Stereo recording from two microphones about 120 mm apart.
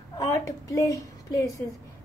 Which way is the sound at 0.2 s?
25° left (ahead or behind).